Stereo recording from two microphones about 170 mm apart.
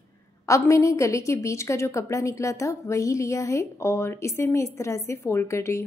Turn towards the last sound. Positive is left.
turn(degrees=15)  # may be behind; listen again after turning